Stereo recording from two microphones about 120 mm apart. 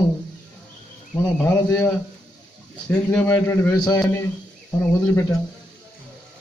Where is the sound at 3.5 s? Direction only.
25° left (ahead or behind).